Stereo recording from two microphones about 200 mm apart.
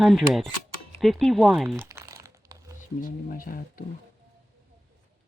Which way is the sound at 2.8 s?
45° left (ahead or behind).